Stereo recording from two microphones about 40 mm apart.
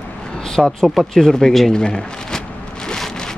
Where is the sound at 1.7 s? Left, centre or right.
Centre.